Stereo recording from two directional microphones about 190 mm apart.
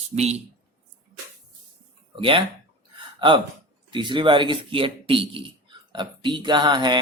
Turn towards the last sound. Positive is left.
turn(degrees=-25)  # may be behind; listen again after turning